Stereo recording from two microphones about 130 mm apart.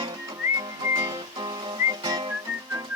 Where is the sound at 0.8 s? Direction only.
25° right (ahead or behind).